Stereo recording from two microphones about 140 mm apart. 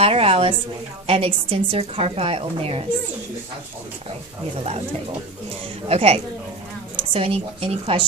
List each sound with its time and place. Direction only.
0.0 s a woman's voice: 45° right (ahead or behind)
5.9 s a woman's voice: 45° right (ahead or behind)